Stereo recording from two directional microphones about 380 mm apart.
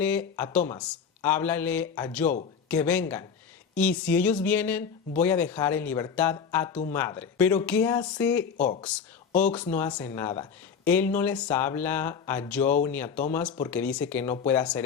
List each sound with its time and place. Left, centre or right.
0.0 s speech: centre